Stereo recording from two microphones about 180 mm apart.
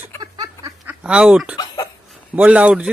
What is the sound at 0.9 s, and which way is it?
Speech, 5° right (ahead or behind).